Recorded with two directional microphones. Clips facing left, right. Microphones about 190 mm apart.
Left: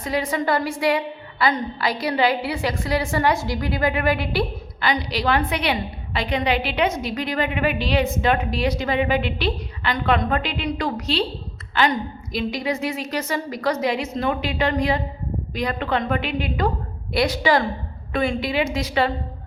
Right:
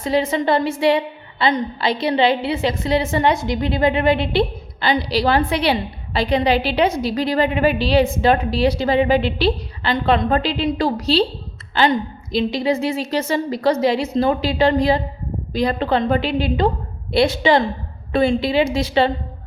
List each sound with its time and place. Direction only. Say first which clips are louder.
0.0 s a woman's voice: right 5 dB; 25° right (ahead or behind)